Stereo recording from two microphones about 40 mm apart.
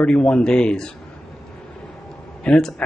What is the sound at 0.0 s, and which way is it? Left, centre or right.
Speech, left.